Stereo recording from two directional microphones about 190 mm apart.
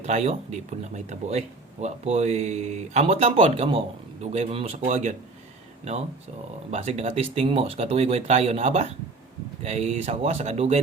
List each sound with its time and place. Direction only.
0.0 s speech: 35° right (ahead or behind)
6.7 s speech: 35° right (ahead or behind)